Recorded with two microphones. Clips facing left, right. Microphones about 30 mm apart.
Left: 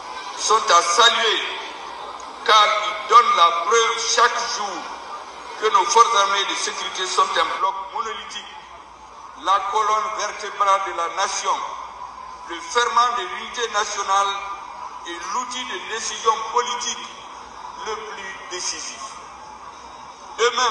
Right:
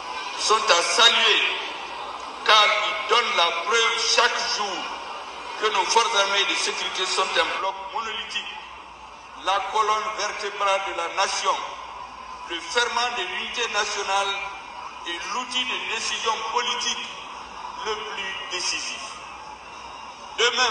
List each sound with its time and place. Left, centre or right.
0.1 s a sound: centre
0.4 s a man's voice: right
9.7 s a man's voice: right
12.9 s a man's voice: right
13.3 s a man's voice: centre
15.0 s a man's voice: right